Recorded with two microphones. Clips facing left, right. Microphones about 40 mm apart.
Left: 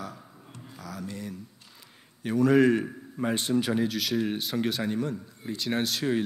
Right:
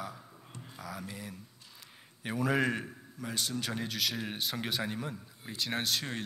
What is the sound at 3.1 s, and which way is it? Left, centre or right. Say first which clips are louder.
Speech: left 10 dB; left.